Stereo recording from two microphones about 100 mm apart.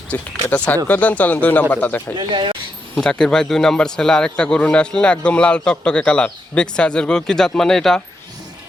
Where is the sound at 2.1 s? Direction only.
50° right (ahead or behind).